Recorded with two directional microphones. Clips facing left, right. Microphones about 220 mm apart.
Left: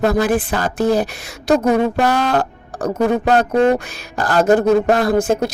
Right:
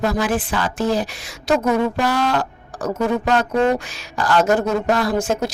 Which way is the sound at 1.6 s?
40° left (ahead or behind).